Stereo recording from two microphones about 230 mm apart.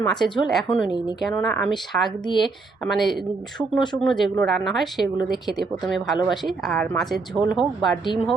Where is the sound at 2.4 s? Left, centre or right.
Centre.